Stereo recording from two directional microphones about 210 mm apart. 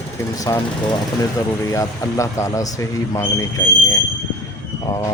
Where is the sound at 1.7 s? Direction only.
15° left (ahead or behind).